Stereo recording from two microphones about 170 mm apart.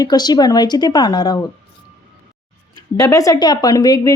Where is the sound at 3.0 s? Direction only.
20° left (ahead or behind).